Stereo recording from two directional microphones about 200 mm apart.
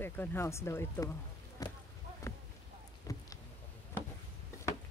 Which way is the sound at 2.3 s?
15° left (ahead or behind).